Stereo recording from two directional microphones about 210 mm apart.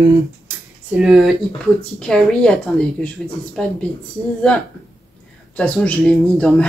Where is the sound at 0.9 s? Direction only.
5° right (ahead or behind).